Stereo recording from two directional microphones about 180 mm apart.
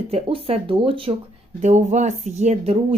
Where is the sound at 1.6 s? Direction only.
40° right (ahead or behind).